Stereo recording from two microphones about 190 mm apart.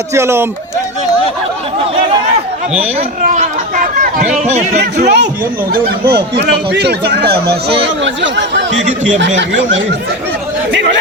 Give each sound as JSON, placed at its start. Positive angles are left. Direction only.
{"t": 0.1, "sound": "speech", "side_deg": -15}
{"t": 5.0, "sound": "speech", "side_deg": -65}
{"t": 7.8, "sound": "speech", "side_deg": -70}